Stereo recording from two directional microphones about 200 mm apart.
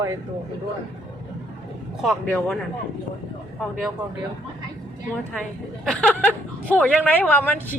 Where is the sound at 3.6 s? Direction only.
Centre (ahead or behind).